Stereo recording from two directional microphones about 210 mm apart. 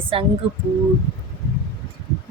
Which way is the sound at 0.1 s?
25° right (ahead or behind).